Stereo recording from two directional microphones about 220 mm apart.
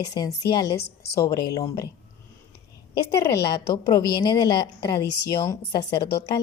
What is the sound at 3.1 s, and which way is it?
A woman's voice, 15° left (ahead or behind).